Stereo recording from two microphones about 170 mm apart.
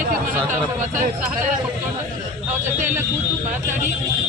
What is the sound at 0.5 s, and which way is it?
Speech, 50° right (ahead or behind).